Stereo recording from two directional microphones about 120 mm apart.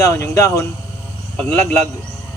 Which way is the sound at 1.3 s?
10° left (ahead or behind).